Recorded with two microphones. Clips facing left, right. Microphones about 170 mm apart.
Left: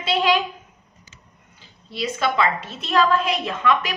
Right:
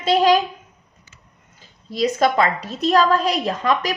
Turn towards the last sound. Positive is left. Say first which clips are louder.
# right 1 dB
turn(degrees=-40)  # may be behind; listen again after turning